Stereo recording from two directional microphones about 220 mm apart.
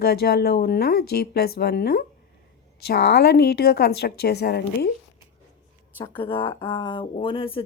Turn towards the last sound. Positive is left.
turn(degrees=25)  # may be behind; listen again after turning